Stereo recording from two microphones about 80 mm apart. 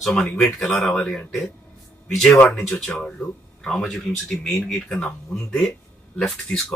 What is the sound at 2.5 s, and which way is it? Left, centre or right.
Speech, centre.